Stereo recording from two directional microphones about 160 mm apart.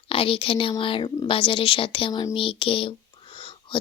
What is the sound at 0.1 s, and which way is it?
Speech, 35° left (ahead or behind).